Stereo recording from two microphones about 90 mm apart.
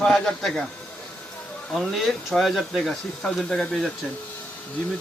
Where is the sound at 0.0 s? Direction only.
5° left (ahead or behind).